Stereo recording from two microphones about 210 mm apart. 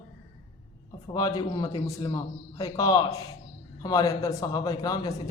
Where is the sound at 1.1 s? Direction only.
20° left (ahead or behind).